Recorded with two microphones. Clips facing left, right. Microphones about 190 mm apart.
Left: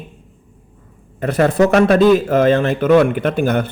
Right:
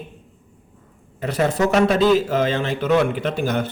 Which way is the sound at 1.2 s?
55° left (ahead or behind).